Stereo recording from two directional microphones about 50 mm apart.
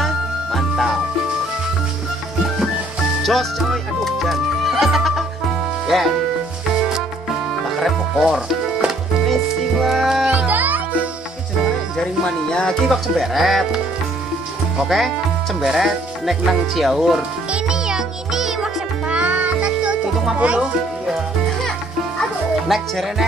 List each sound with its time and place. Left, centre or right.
0.0 s music: centre
3.2 s music: centre
7.8 s music: centre
9.3 s speech: centre
10.3 s music: right
12.0 s speech: centre
12.8 s speech: centre
14.8 s speech: centre
17.5 s music: centre
19.0 s music: right
20.3 s speech: right
22.7 s speech: centre